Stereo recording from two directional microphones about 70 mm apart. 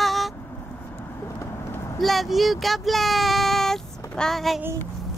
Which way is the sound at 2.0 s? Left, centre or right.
Centre.